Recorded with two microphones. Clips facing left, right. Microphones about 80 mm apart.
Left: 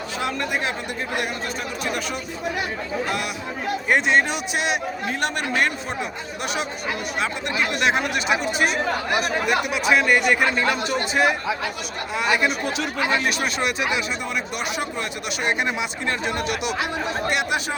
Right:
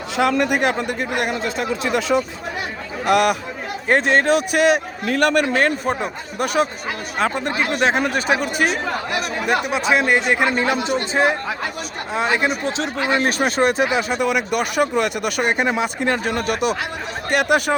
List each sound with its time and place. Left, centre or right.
0.2 s a man's voice: right
3.0 s a man's voice: right
3.8 s speech: right
7.9 s speech: right
9.5 s speech: right
13.2 s speech: right
14.2 s speech: right